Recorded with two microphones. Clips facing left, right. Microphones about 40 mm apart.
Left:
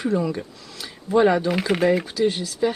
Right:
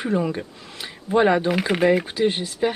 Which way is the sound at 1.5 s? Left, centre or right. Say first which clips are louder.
Right 1 dB; centre.